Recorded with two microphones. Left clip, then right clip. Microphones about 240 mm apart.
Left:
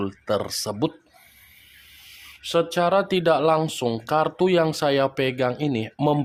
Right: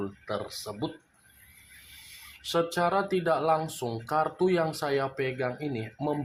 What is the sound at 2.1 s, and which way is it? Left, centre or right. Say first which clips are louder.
Speech: left 6 dB; left.